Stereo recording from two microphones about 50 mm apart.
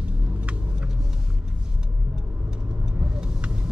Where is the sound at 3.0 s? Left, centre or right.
Centre.